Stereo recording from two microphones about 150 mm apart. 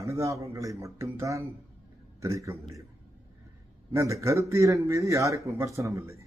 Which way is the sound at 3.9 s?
20° right (ahead or behind).